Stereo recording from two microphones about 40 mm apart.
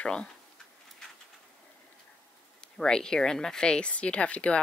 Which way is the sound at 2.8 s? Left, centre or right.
Centre.